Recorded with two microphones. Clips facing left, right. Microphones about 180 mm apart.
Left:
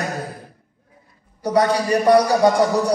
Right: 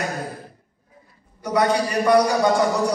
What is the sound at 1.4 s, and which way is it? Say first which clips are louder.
A man's voice: left 2 dB; 35° left (ahead or behind).